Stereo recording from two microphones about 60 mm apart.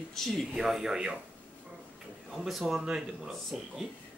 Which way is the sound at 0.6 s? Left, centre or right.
Centre.